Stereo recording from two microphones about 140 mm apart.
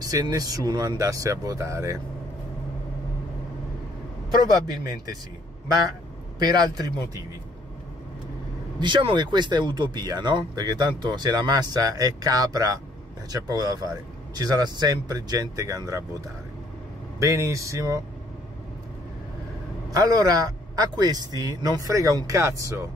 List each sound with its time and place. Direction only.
0.0 s speech: 25° right (ahead or behind)
6.4 s speech: 30° right (ahead or behind)
8.7 s speech: 35° right (ahead or behind)
17.2 s speech: 20° right (ahead or behind)
19.9 s speech: 25° right (ahead or behind)